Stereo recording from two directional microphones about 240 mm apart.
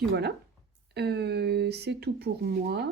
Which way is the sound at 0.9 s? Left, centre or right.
Right.